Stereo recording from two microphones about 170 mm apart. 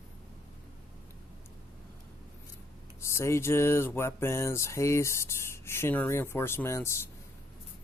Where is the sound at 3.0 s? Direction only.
15° left (ahead or behind).